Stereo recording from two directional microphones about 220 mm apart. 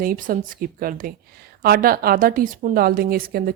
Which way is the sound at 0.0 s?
40° right (ahead or behind).